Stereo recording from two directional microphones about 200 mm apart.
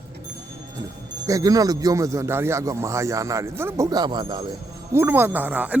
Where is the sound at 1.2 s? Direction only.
15° right (ahead or behind).